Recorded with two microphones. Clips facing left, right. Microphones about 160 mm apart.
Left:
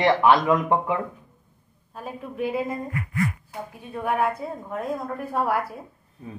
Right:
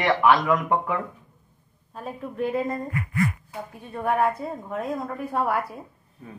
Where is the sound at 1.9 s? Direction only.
5° left (ahead or behind).